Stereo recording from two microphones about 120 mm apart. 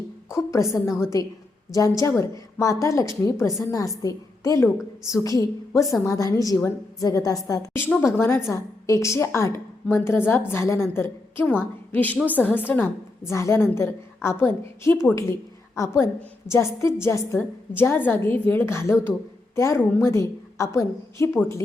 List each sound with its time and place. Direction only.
0.3 s a woman's voice: 25° left (ahead or behind)